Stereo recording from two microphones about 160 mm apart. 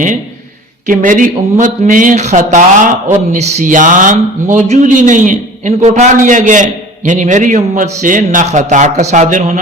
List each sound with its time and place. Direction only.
0.9 s speech: 55° right (ahead or behind)